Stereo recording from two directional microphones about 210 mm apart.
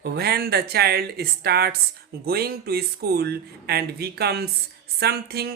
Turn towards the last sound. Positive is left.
turn(degrees=-50)  # may be behind; listen again after turning